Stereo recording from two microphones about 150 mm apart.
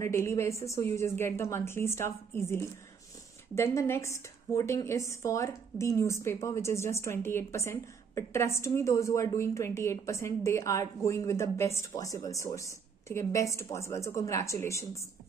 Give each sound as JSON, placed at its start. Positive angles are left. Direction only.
{"t": 0.0, "sound": "a woman's voice", "side_deg": 20}